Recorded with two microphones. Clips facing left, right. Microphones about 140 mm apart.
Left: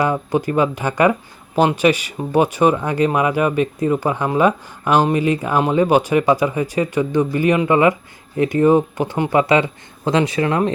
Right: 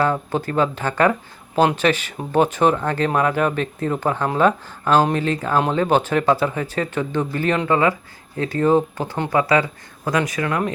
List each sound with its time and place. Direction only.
0.0 s speech: 15° left (ahead or behind)